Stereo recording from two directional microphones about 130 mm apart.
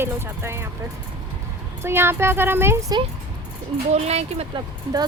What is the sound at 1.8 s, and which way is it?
Speech, 20° right (ahead or behind).